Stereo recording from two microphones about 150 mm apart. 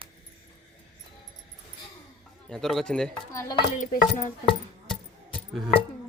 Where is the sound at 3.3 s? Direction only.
20° left (ahead or behind).